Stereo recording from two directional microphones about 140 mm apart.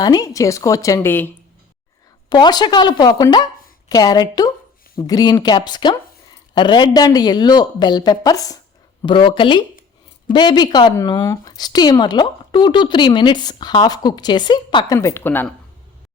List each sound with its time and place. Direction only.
0.0 s speech: 25° left (ahead or behind)
2.3 s speech: 30° left (ahead or behind)
14.9 s speech: 20° left (ahead or behind)